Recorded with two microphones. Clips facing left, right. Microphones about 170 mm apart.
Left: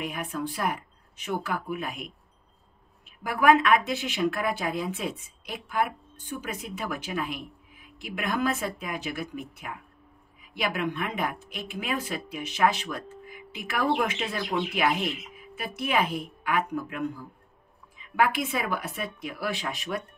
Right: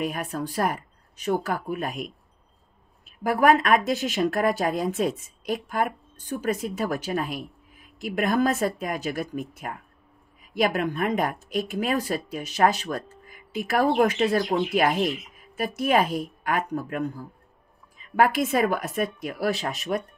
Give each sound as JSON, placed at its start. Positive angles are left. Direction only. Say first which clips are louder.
{"t": 0.0, "sound": "speech", "louder": "right 3 dB", "side_deg": -40}
{"t": 3.1, "sound": "speech", "louder": "right 2 dB", "side_deg": -40}